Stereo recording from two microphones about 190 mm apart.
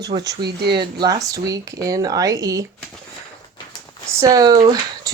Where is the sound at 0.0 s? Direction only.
20° right (ahead or behind).